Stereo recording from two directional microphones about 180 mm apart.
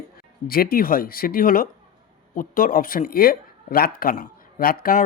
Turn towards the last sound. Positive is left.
turn(degrees=50)  # may be behind; listen again after turning